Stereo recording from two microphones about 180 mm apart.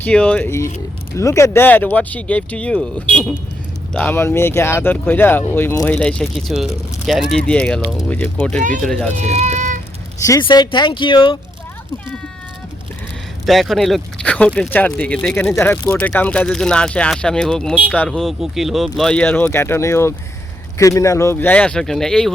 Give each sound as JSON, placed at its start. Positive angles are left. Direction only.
{"t": 0.0, "sound": "speech", "side_deg": 5}
{"t": 9.1, "sound": "baby cry", "side_deg": -40}
{"t": 10.4, "sound": "speech", "side_deg": 25}
{"t": 13.4, "sound": "speech", "side_deg": 0}